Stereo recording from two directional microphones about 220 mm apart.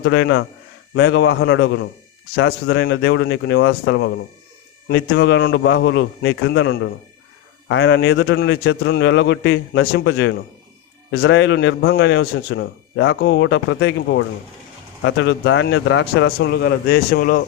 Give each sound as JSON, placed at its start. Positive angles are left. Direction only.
{"t": 0.0, "sound": "a man's voice", "side_deg": 55}
{"t": 11.1, "sound": "speech", "side_deg": 65}